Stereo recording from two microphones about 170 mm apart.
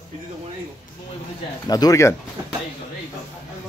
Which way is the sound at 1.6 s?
20° left (ahead or behind).